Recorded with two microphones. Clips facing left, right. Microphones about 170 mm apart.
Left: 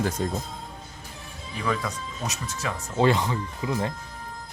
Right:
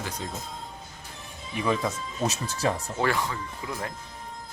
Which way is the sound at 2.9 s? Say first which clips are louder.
Left 5 dB; 20° left (ahead or behind).